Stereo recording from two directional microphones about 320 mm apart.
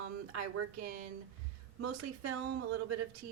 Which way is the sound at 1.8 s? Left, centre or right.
Right.